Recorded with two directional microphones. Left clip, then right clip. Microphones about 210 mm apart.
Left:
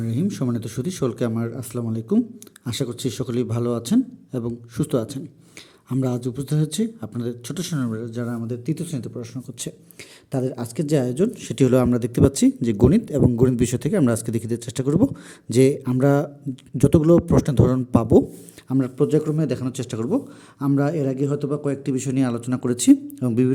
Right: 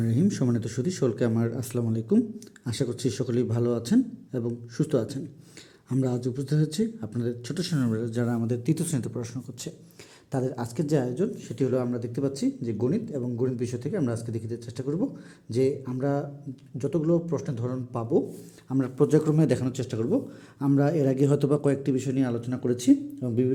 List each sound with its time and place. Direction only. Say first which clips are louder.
0.0 s speech: left 1 dB; 5° left (ahead or behind); by 18.2 s 35° left (ahead or behind)
18.7 s speech: left 3 dB; 15° left (ahead or behind)
21.9 s speech: left 4 dB; 20° left (ahead or behind)